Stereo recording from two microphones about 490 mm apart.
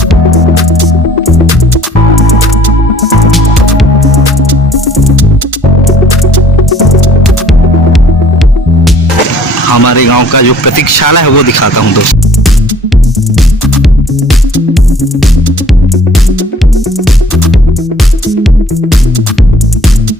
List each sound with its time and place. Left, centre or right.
3.2 s music: centre
6.7 s music: centre
9.7 s speech: left